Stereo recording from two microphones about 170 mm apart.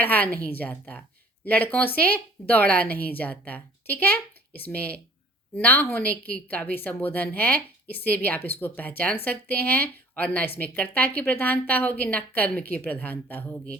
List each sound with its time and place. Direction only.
0.0 s a woman's voice: 10° left (ahead or behind)